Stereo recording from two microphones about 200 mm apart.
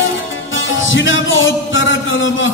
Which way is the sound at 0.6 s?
75° left (ahead or behind).